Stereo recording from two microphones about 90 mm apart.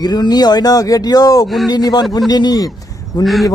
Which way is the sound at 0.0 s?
50° left (ahead or behind).